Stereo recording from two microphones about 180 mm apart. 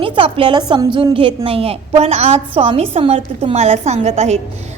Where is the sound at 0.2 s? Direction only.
30° right (ahead or behind).